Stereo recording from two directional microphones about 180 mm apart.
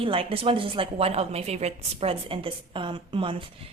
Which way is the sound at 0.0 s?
30° right (ahead or behind).